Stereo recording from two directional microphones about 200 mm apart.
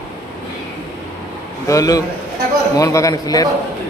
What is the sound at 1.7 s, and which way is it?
A man's voice, 15° left (ahead or behind).